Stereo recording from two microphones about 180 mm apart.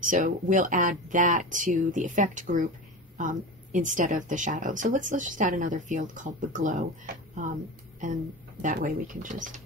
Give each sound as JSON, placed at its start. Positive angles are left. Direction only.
{"t": 0.0, "sound": "speech", "side_deg": -45}
{"t": 8.6, "sound": "speech", "side_deg": -50}